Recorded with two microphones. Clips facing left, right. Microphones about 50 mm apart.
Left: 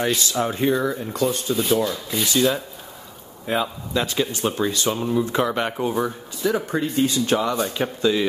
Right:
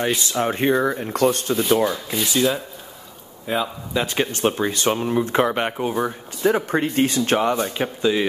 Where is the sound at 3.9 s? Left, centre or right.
Centre.